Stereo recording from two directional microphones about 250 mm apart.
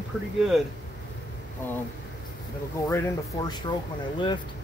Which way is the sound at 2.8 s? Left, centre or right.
Centre.